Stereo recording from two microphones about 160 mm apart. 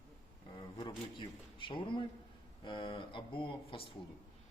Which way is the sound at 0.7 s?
30° left (ahead or behind).